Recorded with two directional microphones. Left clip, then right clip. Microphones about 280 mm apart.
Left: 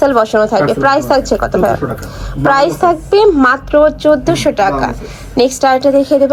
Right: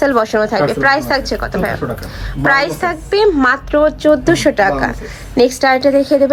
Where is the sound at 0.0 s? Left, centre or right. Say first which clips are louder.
Left 3 dB; centre.